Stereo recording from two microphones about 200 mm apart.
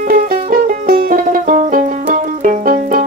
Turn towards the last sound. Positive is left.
turn(degrees=-40)  # may be behind; listen again after turning